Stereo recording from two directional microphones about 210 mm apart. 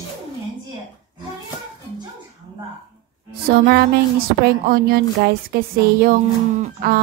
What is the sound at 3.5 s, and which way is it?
A woman's voice, 45° right (ahead or behind).